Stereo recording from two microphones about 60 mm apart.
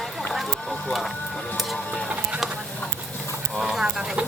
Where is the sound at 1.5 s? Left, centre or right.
Centre.